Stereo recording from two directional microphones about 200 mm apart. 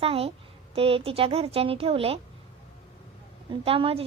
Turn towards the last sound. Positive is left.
turn(degrees=-30)  # may be behind; listen again after turning